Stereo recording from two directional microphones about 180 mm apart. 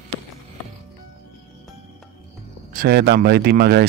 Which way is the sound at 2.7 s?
60° right (ahead or behind).